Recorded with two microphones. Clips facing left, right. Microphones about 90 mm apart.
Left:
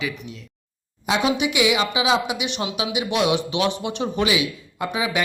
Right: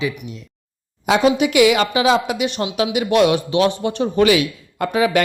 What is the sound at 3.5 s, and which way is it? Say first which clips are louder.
Speech: right 6 dB; 40° right (ahead or behind).